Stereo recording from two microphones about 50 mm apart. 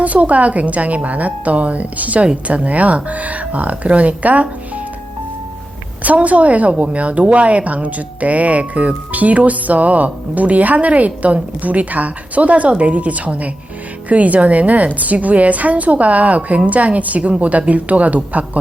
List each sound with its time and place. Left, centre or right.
0.0 s a woman's voice: right
6.0 s a woman's voice: right